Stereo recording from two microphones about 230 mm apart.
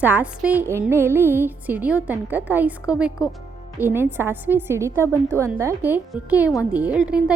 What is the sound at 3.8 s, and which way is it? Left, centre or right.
A woman's voice, centre.